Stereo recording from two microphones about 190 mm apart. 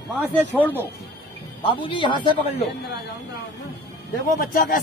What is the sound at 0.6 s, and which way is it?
Speech, 10° left (ahead or behind).